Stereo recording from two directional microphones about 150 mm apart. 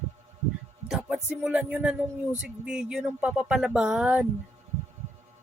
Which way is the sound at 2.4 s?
5° right (ahead or behind).